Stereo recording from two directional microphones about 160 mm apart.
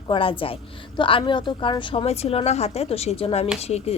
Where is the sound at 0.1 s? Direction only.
35° left (ahead or behind).